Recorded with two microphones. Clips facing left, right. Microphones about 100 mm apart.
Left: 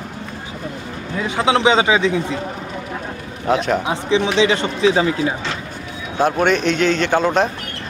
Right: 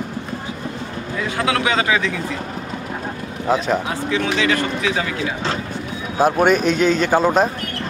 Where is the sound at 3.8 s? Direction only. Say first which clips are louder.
Left 3 dB; 20° left (ahead or behind).